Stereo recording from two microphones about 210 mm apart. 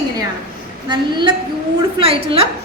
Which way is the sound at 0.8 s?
20° right (ahead or behind).